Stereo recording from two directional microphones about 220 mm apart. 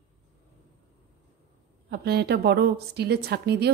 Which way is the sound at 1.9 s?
45° right (ahead or behind).